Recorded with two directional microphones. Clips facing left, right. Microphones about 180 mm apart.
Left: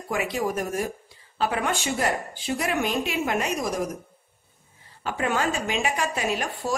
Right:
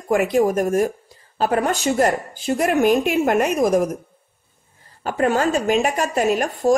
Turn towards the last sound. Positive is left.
turn(degrees=-45)  # may be behind; listen again after turning